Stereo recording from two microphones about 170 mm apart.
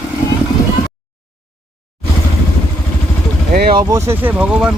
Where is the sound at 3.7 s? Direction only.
20° right (ahead or behind).